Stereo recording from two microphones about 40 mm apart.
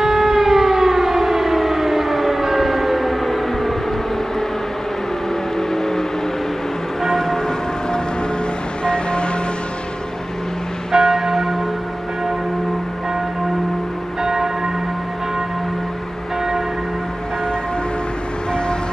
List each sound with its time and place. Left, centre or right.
0.0 s civil defense siren: centre
5.7 s vehicle: centre
7.0 s church bell: centre
8.8 s vehicle: left
10.9 s church bell: centre
14.2 s church bell: centre